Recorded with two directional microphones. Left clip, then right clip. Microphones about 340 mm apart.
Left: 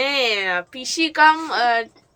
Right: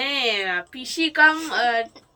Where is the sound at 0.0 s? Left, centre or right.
Centre.